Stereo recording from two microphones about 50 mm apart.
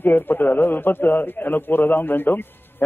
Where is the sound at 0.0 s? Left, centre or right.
Left.